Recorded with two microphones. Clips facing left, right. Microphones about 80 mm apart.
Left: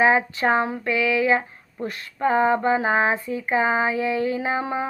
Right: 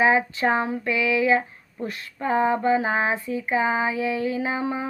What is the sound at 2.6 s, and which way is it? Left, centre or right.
Female singing, left.